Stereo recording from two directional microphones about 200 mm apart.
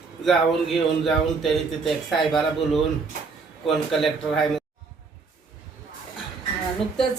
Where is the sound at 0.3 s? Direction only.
Centre (ahead or behind).